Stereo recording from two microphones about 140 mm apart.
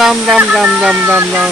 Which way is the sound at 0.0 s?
5° right (ahead or behind).